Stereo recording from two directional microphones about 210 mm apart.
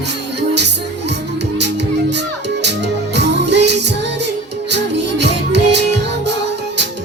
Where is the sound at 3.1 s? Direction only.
55° right (ahead or behind).